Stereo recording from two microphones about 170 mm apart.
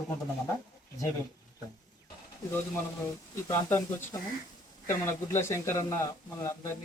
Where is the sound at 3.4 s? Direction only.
20° left (ahead or behind).